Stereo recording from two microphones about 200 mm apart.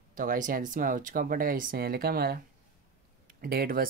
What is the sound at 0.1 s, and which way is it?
Speech, 40° right (ahead or behind).